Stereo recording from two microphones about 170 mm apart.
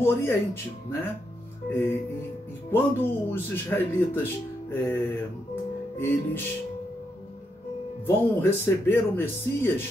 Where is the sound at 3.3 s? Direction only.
15° left (ahead or behind).